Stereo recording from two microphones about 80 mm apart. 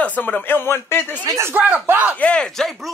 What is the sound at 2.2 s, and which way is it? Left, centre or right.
Speech, centre.